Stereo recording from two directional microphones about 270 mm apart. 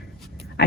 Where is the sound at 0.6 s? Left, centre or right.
Left.